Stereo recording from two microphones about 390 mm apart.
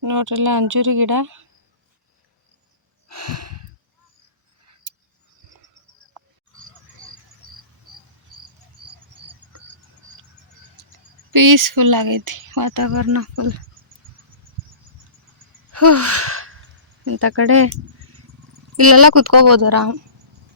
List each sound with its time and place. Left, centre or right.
0.0 s speech: right
3.1 s a sound: right
11.3 s speech: right
15.7 s gasp: right
17.0 s speech: right
18.8 s speech: right